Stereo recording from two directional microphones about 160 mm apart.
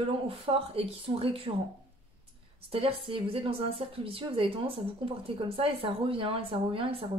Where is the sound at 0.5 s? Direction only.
35° right (ahead or behind).